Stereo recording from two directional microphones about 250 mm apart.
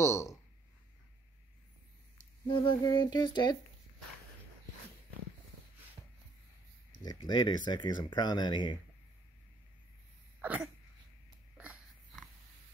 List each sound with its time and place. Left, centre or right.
0.0 s speech: centre
2.4 s speech: centre
7.2 s speech: centre
10.4 s cough: centre
11.5 s a sound: centre